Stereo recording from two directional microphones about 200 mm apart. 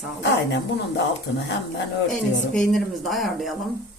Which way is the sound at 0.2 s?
60° left (ahead or behind).